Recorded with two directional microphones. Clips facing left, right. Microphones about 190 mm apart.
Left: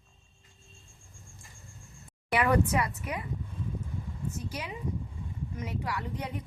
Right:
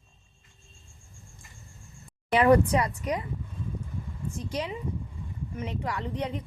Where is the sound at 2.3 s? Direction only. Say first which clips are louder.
Right 6 dB; 30° right (ahead or behind).